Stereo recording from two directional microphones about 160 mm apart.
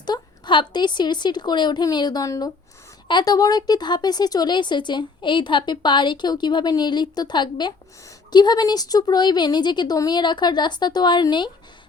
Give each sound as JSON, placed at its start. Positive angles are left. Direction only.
{"t": 0.0, "sound": "speech", "side_deg": 30}